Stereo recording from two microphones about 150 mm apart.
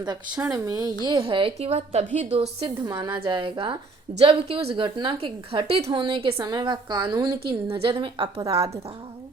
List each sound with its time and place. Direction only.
0.0 s a woman's voice: 25° right (ahead or behind)